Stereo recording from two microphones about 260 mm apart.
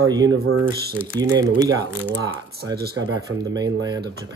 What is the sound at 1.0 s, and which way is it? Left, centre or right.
Speech, centre.